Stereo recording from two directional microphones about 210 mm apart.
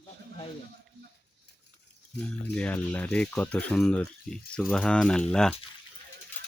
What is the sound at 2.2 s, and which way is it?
Speech, 5° left (ahead or behind).